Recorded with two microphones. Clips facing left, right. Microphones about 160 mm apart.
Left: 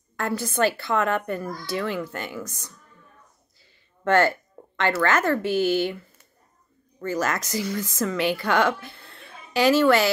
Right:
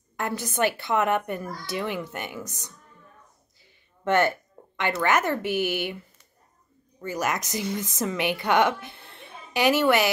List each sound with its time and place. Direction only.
0.2 s a woman's voice: 15° right (ahead or behind)
4.0 s a woman's voice: 20° right (ahead or behind)